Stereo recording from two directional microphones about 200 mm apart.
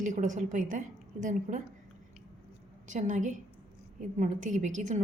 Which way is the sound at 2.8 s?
40° right (ahead or behind).